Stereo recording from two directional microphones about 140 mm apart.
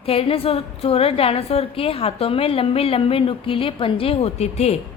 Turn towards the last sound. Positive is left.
turn(degrees=50)  # may be behind; listen again after turning